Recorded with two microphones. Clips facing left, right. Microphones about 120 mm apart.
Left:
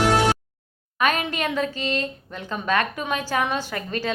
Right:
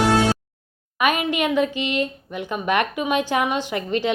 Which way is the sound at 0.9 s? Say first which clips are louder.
Right 2 dB; 10° right (ahead or behind).